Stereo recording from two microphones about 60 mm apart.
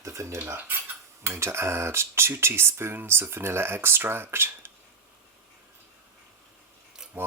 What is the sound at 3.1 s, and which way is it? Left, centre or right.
Speech, right.